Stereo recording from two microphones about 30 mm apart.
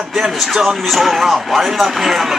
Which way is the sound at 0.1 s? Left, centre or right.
Centre.